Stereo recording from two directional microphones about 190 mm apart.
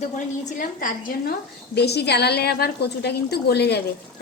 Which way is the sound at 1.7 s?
60° left (ahead or behind).